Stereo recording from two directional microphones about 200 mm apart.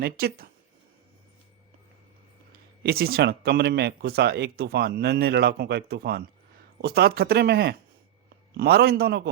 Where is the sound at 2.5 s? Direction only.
50° right (ahead or behind).